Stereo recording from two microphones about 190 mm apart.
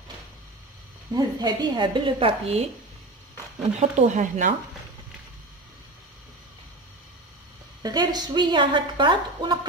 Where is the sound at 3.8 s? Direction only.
40° right (ahead or behind).